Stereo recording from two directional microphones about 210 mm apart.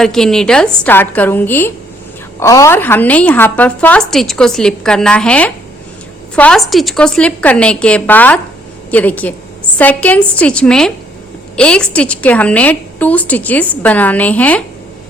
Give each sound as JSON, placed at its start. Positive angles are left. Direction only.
{"t": 0.0, "sound": "a woman's voice", "side_deg": 5}